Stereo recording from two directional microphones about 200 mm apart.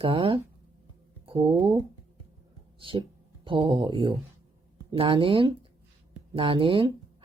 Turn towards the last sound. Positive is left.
turn(degrees=-25)  # may be behind; listen again after turning